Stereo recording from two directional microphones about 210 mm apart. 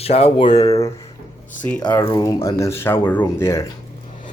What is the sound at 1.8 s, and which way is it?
Speech, 20° left (ahead or behind).